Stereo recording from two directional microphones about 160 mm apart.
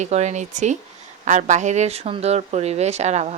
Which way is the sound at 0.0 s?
45° right (ahead or behind).